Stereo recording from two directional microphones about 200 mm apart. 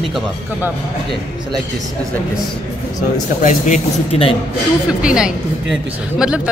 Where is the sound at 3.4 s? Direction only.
40° left (ahead or behind).